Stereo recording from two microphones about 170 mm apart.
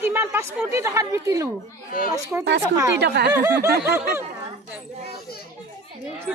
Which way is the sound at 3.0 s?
75° right (ahead or behind).